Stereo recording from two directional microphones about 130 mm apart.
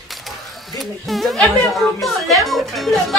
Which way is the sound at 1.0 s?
Centre (ahead or behind).